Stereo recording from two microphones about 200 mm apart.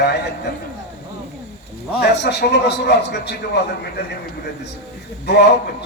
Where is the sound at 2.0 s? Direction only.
55° left (ahead or behind).